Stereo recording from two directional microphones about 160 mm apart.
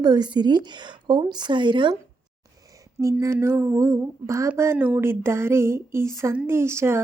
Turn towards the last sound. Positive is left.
turn(degrees=-15)  # may be behind; listen again after turning